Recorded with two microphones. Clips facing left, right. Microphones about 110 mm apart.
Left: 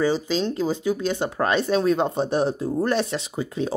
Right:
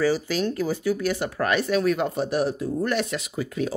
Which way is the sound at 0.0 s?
20° left (ahead or behind).